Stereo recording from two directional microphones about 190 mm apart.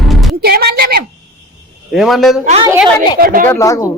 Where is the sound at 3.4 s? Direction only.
15° left (ahead or behind).